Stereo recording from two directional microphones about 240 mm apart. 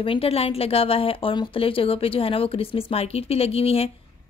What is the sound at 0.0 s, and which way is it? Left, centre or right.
Speech, left.